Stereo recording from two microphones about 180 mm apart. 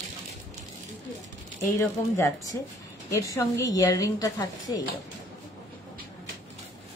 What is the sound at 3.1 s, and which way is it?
A woman's voice, 20° left (ahead or behind).